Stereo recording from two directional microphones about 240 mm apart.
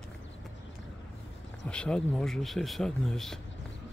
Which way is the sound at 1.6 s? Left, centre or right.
Centre.